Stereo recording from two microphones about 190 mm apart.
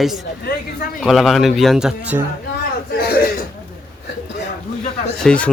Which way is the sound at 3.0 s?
50° left (ahead or behind).